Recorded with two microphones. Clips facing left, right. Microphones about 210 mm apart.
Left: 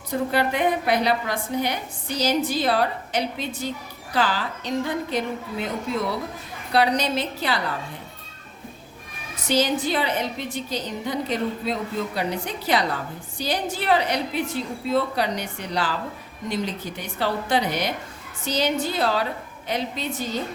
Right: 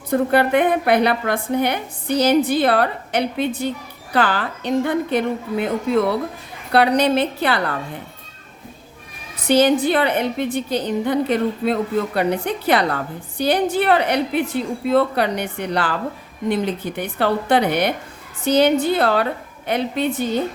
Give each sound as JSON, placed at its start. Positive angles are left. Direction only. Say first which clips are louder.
{"t": 0.1, "sound": "a woman's voice", "louder": "right 7 dB", "side_deg": -55}
{"t": 9.5, "sound": "a woman's voice", "louder": "right 7 dB", "side_deg": -60}